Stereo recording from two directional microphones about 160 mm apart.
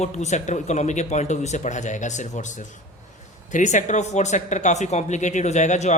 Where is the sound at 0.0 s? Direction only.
45° left (ahead or behind).